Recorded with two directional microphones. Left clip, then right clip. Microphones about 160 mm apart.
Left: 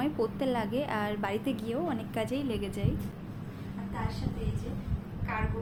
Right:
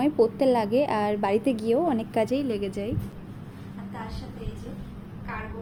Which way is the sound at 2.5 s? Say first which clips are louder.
Right 5 dB; 20° right (ahead or behind).